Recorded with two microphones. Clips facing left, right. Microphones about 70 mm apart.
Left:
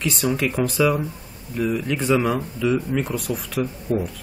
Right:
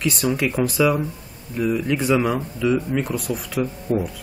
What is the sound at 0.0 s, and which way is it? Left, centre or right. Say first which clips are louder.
Speech: right 1 dB; centre.